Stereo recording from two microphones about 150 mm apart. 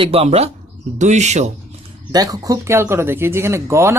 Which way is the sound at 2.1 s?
25° right (ahead or behind).